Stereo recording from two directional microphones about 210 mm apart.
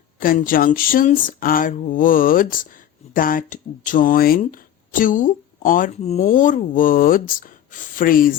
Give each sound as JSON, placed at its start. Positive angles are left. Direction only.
{"t": 0.2, "sound": "speech", "side_deg": 40}